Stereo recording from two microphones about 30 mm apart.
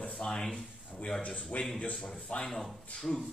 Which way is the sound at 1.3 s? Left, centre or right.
Left.